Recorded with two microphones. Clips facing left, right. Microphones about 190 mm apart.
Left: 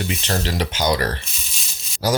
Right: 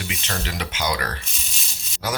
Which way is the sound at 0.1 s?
35° left (ahead or behind).